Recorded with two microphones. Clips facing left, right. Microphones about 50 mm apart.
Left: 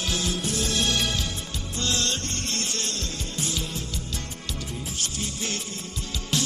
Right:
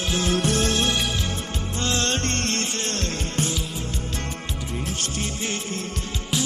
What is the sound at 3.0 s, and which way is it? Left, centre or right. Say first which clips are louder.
Music: right 6 dB; right.